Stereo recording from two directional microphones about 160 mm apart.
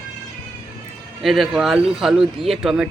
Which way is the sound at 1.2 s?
Centre (ahead or behind).